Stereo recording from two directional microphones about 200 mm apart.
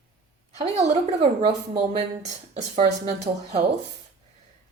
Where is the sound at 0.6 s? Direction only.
35° right (ahead or behind).